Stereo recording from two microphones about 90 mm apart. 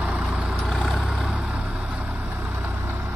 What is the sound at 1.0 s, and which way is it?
Vehicle, 5° right (ahead or behind).